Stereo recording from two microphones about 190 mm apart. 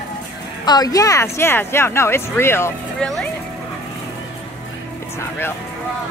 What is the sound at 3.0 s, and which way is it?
Speech, centre (ahead or behind).